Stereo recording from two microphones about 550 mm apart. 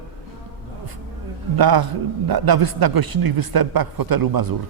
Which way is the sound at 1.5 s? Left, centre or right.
Right.